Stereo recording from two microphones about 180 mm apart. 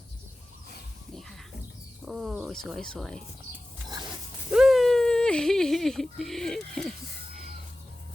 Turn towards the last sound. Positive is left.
turn(degrees=0)  # may be behind; listen again after turning